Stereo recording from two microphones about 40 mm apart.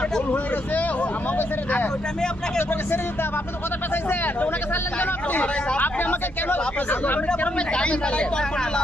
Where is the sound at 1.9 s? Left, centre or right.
Centre.